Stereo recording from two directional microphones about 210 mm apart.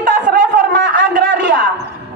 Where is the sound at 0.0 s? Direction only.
40° right (ahead or behind).